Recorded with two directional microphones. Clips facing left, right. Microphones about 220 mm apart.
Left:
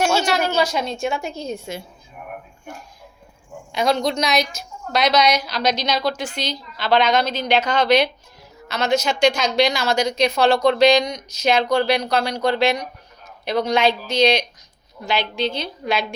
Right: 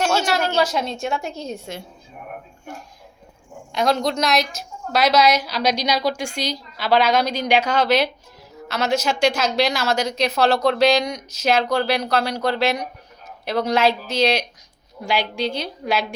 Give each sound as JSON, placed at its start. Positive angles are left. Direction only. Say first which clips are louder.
{"t": 0.0, "sound": "a sound", "louder": "left 1 dB", "side_deg": 10}
{"t": 0.3, "sound": "a woman's voice", "louder": "even", "side_deg": 5}
{"t": 3.7, "sound": "a woman's voice", "louder": "even", "side_deg": 0}